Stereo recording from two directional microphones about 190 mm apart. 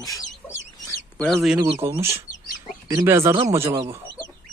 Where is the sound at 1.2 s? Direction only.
Centre (ahead or behind).